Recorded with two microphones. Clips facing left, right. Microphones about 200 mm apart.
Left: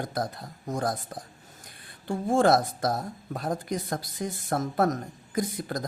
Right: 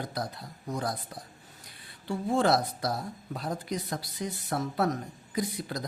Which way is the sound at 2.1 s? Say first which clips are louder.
Left 4 dB; 50° left (ahead or behind).